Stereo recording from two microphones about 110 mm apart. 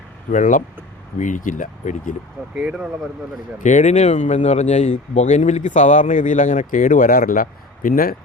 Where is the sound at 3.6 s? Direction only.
90° left.